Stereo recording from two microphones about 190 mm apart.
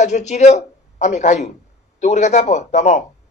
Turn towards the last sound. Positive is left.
turn(degrees=40)  # may be behind; listen again after turning